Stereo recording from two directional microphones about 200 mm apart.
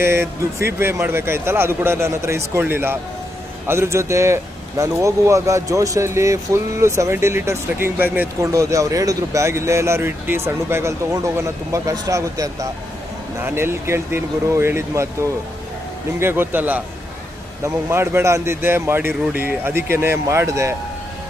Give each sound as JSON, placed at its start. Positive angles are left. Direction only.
{"t": 0.0, "sound": "speech", "side_deg": -10}